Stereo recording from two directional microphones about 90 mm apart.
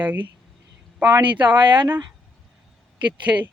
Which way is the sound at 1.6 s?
60° right (ahead or behind).